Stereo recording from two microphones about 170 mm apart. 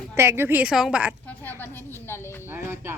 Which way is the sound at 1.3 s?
10° left (ahead or behind).